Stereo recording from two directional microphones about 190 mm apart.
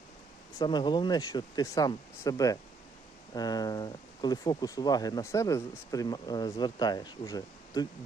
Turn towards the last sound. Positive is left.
turn(degrees=20)  # may be behind; listen again after turning